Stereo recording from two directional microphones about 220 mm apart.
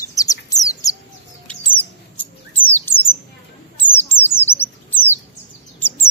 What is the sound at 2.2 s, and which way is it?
Bird, 10° left (ahead or behind).